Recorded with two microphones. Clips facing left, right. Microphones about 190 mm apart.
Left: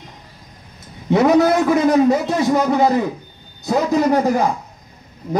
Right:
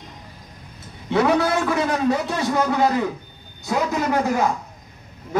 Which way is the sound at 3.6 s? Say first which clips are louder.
Left 6 dB; 35° left (ahead or behind).